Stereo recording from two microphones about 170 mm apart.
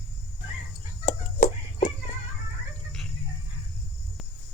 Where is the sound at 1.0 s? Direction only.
40° left (ahead or behind).